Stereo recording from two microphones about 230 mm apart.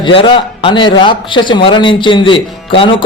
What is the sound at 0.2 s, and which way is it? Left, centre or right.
A man's voice, left.